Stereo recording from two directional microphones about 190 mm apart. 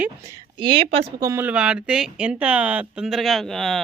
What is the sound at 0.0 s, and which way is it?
Speech, 15° right (ahead or behind).